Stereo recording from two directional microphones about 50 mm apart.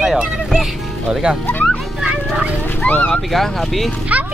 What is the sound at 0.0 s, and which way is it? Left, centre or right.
Music, centre.